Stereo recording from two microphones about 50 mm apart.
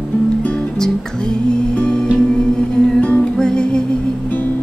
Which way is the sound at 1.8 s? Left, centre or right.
Left.